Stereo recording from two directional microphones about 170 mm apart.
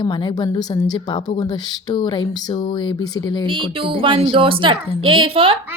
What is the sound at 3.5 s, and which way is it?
Speech, 30° right (ahead or behind).